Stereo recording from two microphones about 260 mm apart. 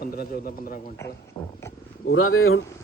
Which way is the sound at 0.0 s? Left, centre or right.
Left.